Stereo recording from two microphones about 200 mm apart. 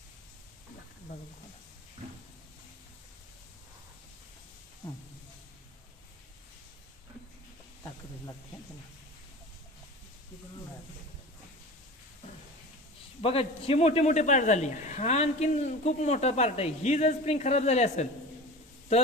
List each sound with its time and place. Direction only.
13.2 s a man's voice: 30° left (ahead or behind)